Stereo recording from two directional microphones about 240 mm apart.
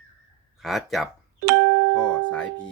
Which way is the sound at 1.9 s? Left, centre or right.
Centre.